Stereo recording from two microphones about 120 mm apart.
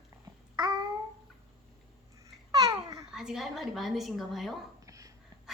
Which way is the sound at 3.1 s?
5° right (ahead or behind).